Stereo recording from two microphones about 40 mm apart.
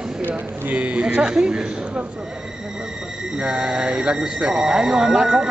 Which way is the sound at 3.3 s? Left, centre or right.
Right.